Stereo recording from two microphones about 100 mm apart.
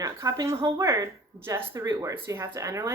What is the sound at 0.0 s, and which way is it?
A woman's voice, 35° right (ahead or behind).